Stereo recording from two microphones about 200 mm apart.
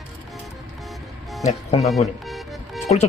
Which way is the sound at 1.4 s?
30° left (ahead or behind).